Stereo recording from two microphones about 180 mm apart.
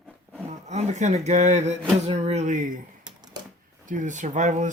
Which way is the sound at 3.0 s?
20° right (ahead or behind).